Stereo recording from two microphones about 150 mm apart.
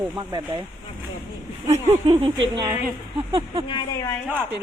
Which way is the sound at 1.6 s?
45° right (ahead or behind).